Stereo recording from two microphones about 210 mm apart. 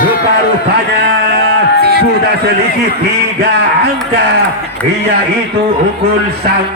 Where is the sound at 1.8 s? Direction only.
50° right (ahead or behind).